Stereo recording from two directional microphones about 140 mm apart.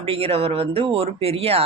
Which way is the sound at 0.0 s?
45° right (ahead or behind).